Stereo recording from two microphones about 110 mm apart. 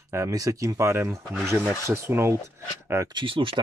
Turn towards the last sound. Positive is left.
turn(degrees=-50)  # may be behind; listen again after turning